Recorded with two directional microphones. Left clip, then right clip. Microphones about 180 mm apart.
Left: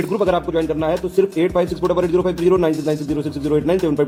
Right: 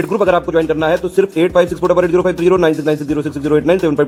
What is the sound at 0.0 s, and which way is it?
A man's voice, 15° right (ahead or behind).